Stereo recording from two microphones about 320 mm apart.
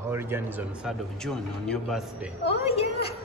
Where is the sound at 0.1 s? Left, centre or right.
Centre.